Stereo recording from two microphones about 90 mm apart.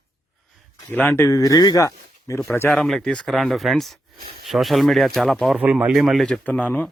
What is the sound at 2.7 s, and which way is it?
Speech, 5° left (ahead or behind).